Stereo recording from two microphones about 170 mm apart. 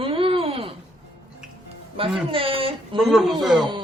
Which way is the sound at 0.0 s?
30° right (ahead or behind).